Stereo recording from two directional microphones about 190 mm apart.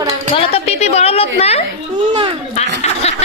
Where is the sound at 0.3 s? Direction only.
30° left (ahead or behind).